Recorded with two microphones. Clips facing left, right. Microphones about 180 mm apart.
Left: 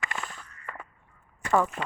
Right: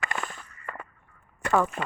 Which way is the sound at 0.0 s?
55° right (ahead or behind).